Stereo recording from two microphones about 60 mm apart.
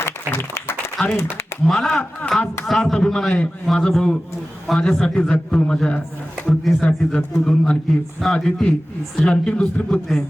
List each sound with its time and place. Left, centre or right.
0.0 s applause: left
1.0 s a man's voice: centre